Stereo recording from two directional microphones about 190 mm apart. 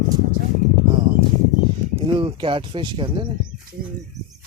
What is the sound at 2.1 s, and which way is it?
Speech, 25° right (ahead or behind).